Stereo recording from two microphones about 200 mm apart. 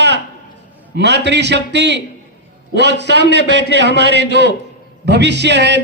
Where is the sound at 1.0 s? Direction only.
60° right (ahead or behind).